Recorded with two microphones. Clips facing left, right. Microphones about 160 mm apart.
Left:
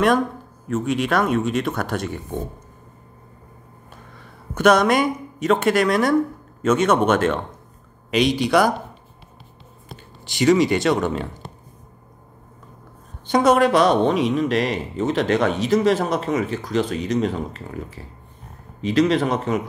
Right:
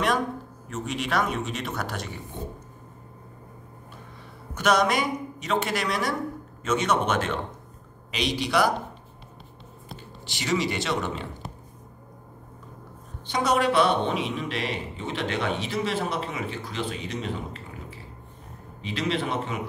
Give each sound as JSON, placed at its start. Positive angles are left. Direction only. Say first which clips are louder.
{"t": 0.7, "sound": "speech", "louder": "left 9 dB", "side_deg": 55}
{"t": 4.6, "sound": "speech", "louder": "left 7 dB", "side_deg": 55}
{"t": 10.2, "sound": "speech", "louder": "left 10 dB", "side_deg": 50}
{"t": 13.3, "sound": "speech", "louder": "left 8 dB", "side_deg": 50}